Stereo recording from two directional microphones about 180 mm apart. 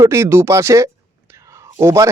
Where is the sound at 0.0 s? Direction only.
15° right (ahead or behind).